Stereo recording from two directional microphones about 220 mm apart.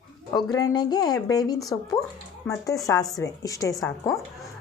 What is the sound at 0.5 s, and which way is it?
A woman's voice, 20° left (ahead or behind).